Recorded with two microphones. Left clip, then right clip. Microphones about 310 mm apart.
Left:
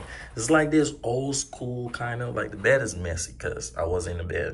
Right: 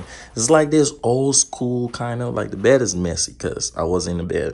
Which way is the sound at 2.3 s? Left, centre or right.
Centre.